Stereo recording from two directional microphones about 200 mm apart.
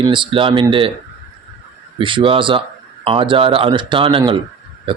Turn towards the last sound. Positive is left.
turn(degrees=-25)  # may be behind; listen again after turning